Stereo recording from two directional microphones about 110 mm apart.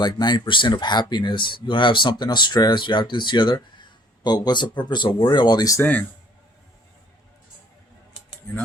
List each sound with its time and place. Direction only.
0.0 s speech: 40° left (ahead or behind)
5.8 s speech: 15° left (ahead or behind)
8.4 s cutlery: 20° left (ahead or behind)